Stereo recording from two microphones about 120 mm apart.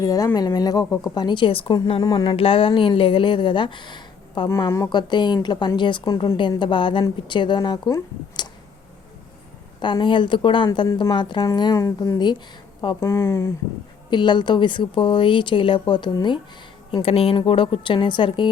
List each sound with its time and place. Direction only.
0.0 s a woman's voice: 30° left (ahead or behind)
2.3 s a woman's voice: 50° left (ahead or behind)
9.8 s a woman's voice: 40° left (ahead or behind)
13.0 s speech: 20° left (ahead or behind)
14.1 s speech: 40° left (ahead or behind)
17.0 s speech: 55° left (ahead or behind)